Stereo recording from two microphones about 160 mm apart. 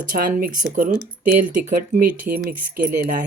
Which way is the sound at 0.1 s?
60° right (ahead or behind).